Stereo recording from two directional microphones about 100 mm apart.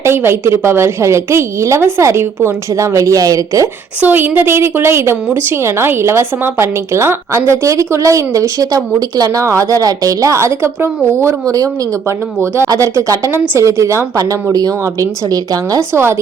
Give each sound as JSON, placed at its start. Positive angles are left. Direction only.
{"t": 0.0, "sound": "a woman's voice", "side_deg": -25}
{"t": 4.0, "sound": "a woman's voice", "side_deg": -20}
{"t": 15.9, "sound": "a woman's voice", "side_deg": -25}